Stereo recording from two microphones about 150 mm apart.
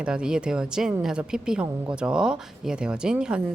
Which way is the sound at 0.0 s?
5° right (ahead or behind).